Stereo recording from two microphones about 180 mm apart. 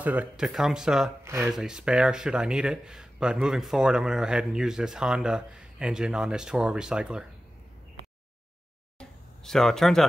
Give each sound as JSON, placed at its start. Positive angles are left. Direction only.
{"t": 0.0, "sound": "speech", "side_deg": -10}
{"t": 9.4, "sound": "speech", "side_deg": 0}